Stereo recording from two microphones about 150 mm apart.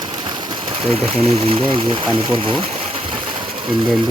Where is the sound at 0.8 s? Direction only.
45° right (ahead or behind).